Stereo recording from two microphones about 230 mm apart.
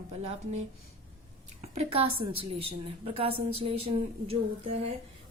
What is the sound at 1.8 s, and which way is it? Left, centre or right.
A woman's voice, right.